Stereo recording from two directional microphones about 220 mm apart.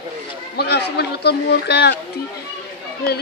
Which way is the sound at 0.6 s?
50° left (ahead or behind).